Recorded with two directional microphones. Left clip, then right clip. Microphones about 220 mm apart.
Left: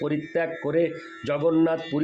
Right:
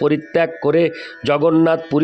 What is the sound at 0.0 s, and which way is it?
A man's voice, 50° right (ahead or behind).